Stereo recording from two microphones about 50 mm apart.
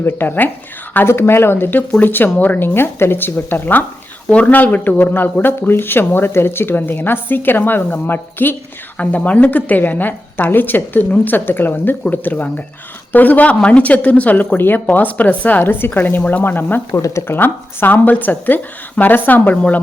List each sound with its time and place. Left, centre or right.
0.0 s speech: left
1.0 s speech: left
4.3 s speech: left
9.0 s speech: left
16.9 s speech: left